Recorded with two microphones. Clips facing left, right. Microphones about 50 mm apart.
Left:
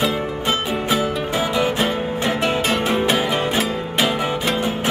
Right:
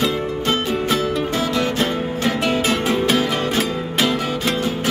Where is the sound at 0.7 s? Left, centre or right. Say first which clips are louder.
Right 1 dB; centre.